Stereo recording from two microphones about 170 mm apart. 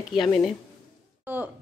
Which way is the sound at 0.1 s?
Centre (ahead or behind).